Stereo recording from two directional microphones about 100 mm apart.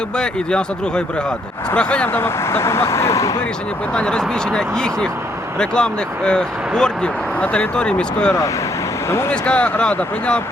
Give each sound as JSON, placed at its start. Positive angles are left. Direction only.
{"t": 0.2, "sound": "speech", "side_deg": 10}
{"t": 2.1, "sound": "speech", "side_deg": 25}
{"t": 3.9, "sound": "speech", "side_deg": 10}